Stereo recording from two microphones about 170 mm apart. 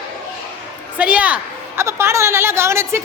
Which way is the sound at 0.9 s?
10° right (ahead or behind).